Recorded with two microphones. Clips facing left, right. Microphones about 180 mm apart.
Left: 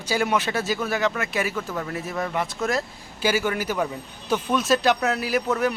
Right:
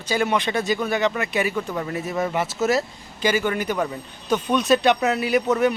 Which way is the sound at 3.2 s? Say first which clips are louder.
Right 2 dB; 5° left (ahead or behind).